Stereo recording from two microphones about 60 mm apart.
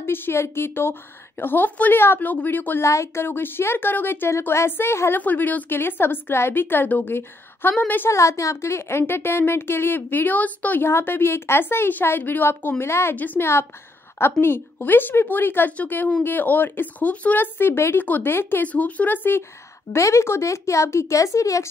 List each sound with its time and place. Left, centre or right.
0.0 s a woman's voice: left
2.8 s speech: left
3.3 s a woman's voice: left
5.2 s a woman's voice: left
8.1 s a woman's voice: left
10.9 s a woman's voice: left
13.1 s a woman's voice: left
17.6 s a woman's voice: left
18.7 s speech: left
19.9 s speech: left